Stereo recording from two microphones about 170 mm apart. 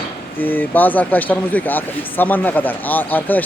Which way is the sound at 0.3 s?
10° left (ahead or behind).